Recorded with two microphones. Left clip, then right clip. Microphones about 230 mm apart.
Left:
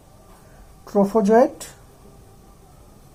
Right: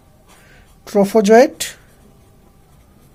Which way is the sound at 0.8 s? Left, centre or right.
Right.